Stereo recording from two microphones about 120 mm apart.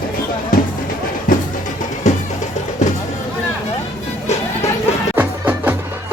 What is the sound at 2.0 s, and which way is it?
Music, 90° left.